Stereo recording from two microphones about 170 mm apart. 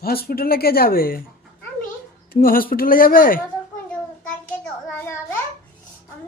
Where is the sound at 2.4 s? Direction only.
55° left (ahead or behind).